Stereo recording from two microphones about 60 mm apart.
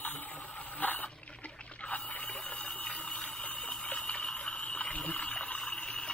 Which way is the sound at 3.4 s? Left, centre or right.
Left.